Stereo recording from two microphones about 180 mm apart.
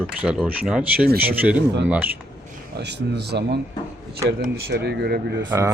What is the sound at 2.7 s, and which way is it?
Speech, 70° right (ahead or behind).